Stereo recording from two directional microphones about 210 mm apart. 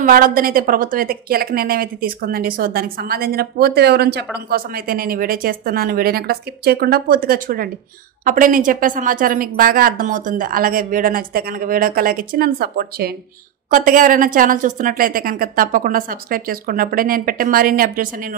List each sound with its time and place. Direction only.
0.0 s a woman's voice: 40° right (ahead or behind)